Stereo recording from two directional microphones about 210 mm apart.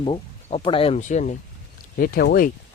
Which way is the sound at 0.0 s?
25° left (ahead or behind).